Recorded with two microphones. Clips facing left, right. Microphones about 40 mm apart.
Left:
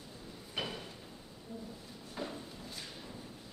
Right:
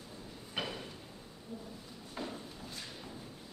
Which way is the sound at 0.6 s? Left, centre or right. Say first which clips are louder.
Even; centre.